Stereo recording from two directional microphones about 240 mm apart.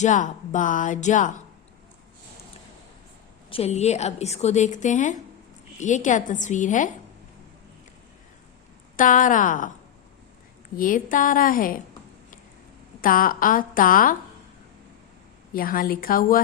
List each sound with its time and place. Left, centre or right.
0.0 s speech: left
3.5 s a woman's voice: left
9.0 s speech: left
10.8 s speech: left
13.0 s speech: left
15.5 s speech: left